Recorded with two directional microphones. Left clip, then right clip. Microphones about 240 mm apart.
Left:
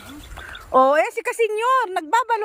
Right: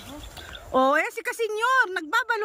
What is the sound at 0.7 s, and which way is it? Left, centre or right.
Speech, centre.